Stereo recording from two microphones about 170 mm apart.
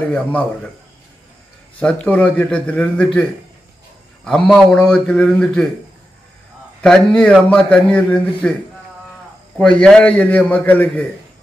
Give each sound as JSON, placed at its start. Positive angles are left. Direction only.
{"t": 0.1, "sound": "a man's voice", "side_deg": 10}
{"t": 1.8, "sound": "a man's voice", "side_deg": 5}
{"t": 6.8, "sound": "a man's voice", "side_deg": 5}
{"t": 9.6, "sound": "a man's voice", "side_deg": 5}